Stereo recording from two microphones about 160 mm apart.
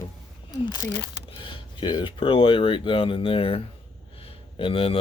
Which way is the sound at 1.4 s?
30° left (ahead or behind).